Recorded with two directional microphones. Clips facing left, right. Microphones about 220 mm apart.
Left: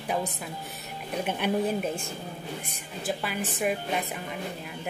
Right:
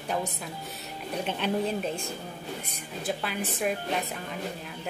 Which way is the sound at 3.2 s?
5° left (ahead or behind).